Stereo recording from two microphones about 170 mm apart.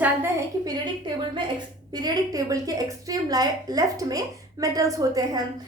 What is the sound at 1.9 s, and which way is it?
A woman's voice, 25° right (ahead or behind).